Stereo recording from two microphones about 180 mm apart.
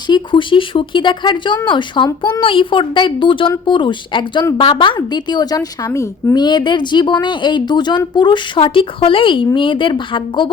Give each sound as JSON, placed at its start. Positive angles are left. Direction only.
{"t": 0.1, "sound": "a woman's voice", "side_deg": 25}